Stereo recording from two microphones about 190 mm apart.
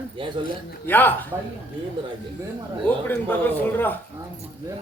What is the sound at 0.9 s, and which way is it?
Speech, 10° left (ahead or behind).